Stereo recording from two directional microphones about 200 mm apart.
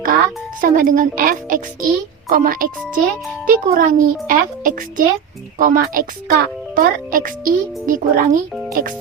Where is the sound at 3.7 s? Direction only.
45° right (ahead or behind).